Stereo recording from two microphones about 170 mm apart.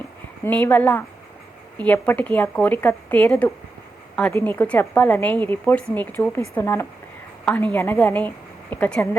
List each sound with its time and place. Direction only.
0.4 s a woman's voice: 10° left (ahead or behind)